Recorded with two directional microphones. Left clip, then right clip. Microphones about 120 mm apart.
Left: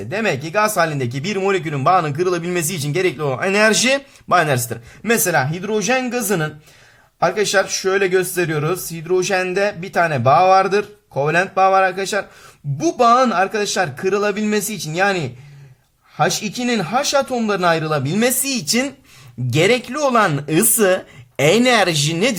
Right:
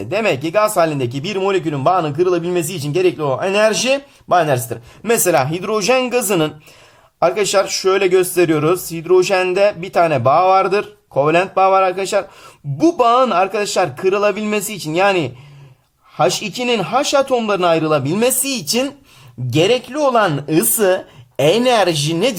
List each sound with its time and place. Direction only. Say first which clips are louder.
0.1 s speech: right 4 dB; 25° right (ahead or behind); by 4.6 s 10° left (ahead or behind)
5.0 s speech: right 3 dB; 25° right (ahead or behind)
16.4 s speech: right 3 dB; 25° right (ahead or behind); by 18.9 s 5° right (ahead or behind)
19.5 s speech: right 1 dB; 10° left (ahead or behind)